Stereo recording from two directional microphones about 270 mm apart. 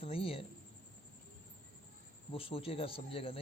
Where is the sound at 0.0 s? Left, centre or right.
Left.